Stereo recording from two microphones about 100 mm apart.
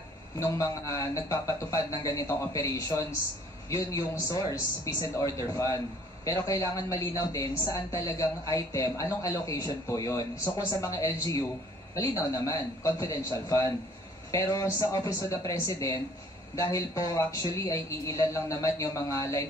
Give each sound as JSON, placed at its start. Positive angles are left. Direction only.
{"t": 0.4, "sound": "a woman's voice", "side_deg": 30}